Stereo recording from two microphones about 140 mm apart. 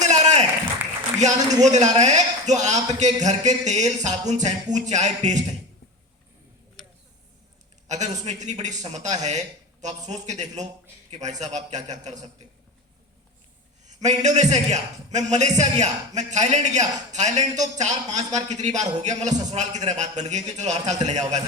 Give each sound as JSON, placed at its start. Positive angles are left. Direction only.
{"t": 0.0, "sound": "applause", "side_deg": -55}
{"t": 1.2, "sound": "a man's voice", "side_deg": -55}
{"t": 7.9, "sound": "a man's voice", "side_deg": -55}
{"t": 13.8, "sound": "a man's voice", "side_deg": -55}